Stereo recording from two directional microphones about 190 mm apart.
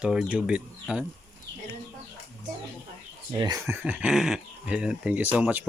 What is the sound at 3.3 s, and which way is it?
Speech, 20° right (ahead or behind).